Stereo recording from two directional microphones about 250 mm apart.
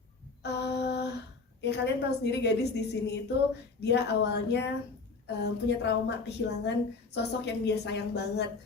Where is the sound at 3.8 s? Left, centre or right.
Left.